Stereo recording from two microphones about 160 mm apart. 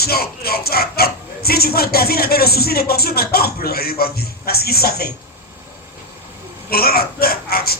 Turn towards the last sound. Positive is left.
turn(degrees=70)  # may be behind; listen again after turning